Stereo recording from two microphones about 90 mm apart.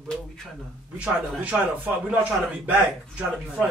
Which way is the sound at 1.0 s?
15° right (ahead or behind).